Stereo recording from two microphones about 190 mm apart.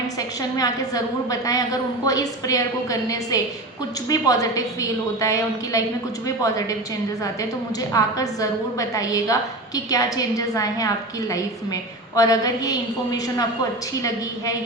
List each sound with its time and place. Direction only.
0.2 s a woman's voice: 20° left (ahead or behind)
7.8 s a woman's voice: 20° left (ahead or behind)